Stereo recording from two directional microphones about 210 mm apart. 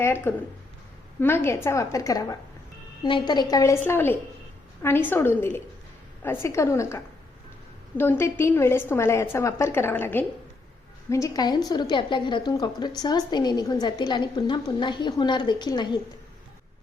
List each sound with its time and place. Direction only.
0.0 s a woman's voice: 10° left (ahead or behind)